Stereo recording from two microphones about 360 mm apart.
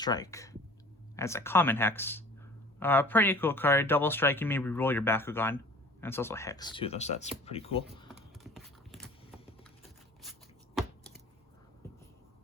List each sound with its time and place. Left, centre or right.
0.0 s speech: centre
8.0 s a sound: centre
10.2 s shuffling cards: centre